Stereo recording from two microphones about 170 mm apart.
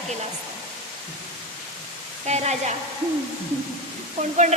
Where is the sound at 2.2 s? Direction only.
40° right (ahead or behind).